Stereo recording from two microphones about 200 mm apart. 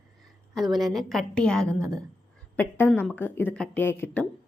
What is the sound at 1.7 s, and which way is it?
Speech, 15° right (ahead or behind).